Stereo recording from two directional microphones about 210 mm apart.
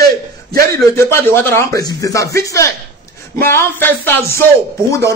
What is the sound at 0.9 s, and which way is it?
Speech, 10° left (ahead or behind).